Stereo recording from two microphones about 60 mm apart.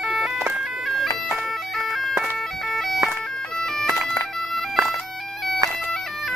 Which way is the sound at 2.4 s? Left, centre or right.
Centre.